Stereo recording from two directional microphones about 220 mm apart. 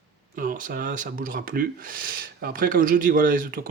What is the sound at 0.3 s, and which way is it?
Speech, 35° right (ahead or behind).